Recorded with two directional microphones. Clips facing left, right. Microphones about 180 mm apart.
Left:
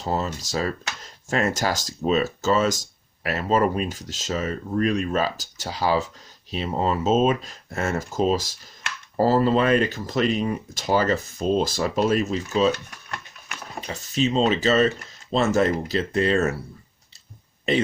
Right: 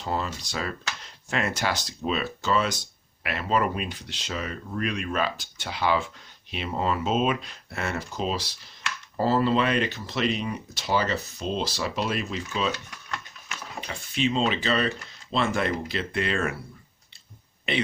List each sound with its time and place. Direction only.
0.0 s speech: 40° left (ahead or behind)
12.7 s a sound: 55° left (ahead or behind)
13.8 s speech: 40° left (ahead or behind)